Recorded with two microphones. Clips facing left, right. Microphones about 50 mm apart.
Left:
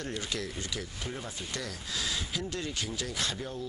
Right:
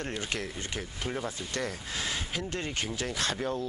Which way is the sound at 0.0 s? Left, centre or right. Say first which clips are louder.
Right 2 dB; right.